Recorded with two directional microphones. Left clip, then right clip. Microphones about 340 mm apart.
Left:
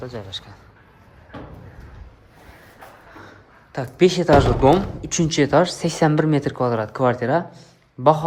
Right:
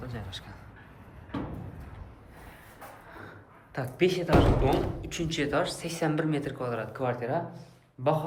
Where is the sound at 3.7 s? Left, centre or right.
Centre.